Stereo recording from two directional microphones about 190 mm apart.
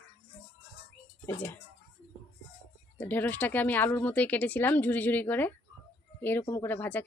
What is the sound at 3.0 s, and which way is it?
Speech, 10° left (ahead or behind).